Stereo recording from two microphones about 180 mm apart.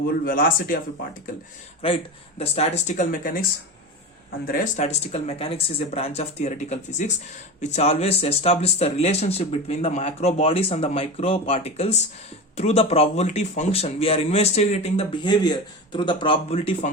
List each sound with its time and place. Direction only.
0.3 s speech: 50° left (ahead or behind)
1.8 s speech: 30° left (ahead or behind); by 3.4 s 50° left (ahead or behind)
4.4 s speech: 50° left (ahead or behind); by 16.9 s 35° left (ahead or behind)